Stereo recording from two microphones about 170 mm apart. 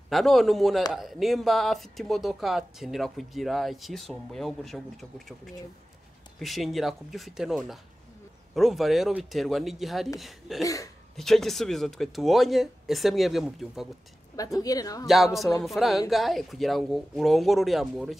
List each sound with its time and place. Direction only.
0.1 s speech: centre (ahead or behind)
6.4 s speech: centre (ahead or behind)
10.6 s a woman's voice: 20° left (ahead or behind)
11.1 s speech: centre (ahead or behind)
14.3 s a woman's voice: 20° left (ahead or behind)
15.0 s speech: centre (ahead or behind)